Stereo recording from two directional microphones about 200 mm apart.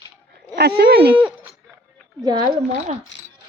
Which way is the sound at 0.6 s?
55° right (ahead or behind).